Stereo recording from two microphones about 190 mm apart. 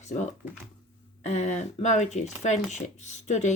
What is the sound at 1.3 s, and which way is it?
Speech, 35° left (ahead or behind).